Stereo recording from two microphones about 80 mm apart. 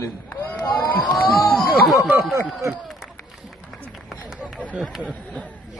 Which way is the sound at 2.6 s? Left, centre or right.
Right.